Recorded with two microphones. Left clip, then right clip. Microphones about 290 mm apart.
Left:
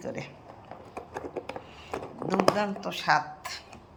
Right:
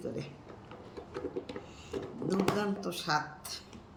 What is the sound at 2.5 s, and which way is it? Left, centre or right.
Speech, centre.